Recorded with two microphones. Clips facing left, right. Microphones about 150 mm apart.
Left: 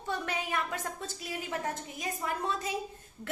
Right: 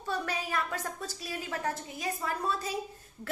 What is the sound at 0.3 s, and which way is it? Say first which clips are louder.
A woman's voice: even; 20° left (ahead or behind).